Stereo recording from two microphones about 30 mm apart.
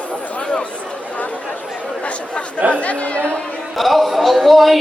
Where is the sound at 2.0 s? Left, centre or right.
Left.